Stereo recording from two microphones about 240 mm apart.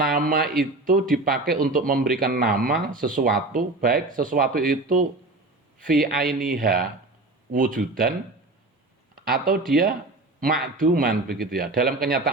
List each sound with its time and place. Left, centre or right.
0.0 s a man's voice: right
9.1 s speech: right